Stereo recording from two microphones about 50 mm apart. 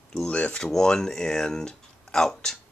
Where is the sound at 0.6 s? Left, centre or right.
Centre.